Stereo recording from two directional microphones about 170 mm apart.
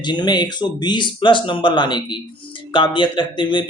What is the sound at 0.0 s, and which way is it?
Speech, 25° left (ahead or behind).